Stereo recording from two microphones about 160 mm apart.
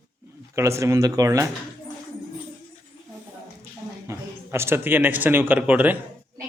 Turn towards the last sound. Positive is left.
turn(degrees=-10)  # may be behind; listen again after turning